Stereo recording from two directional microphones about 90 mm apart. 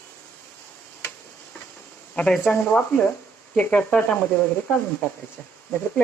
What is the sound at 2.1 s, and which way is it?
Speech, 10° left (ahead or behind).